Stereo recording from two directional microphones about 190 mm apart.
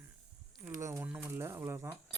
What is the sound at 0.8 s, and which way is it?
Speech, 15° right (ahead or behind).